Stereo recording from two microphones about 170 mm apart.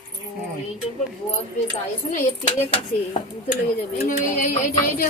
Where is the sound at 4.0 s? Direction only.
55° left (ahead or behind).